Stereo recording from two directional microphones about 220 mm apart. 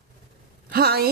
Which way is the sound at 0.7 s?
45° right (ahead or behind).